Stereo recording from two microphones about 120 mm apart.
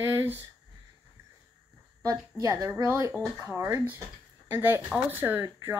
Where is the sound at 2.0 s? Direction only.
30° right (ahead or behind).